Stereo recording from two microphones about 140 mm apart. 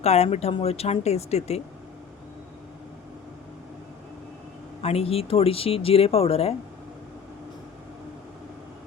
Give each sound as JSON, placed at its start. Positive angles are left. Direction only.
{"t": 0.0, "sound": "speech", "side_deg": 50}
{"t": 4.8, "sound": "speech", "side_deg": 45}